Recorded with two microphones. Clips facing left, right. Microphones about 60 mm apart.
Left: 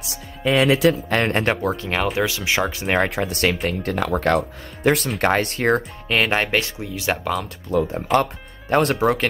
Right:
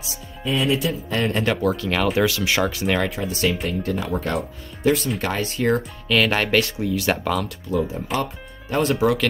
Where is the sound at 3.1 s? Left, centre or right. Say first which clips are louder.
Left 2 dB; left.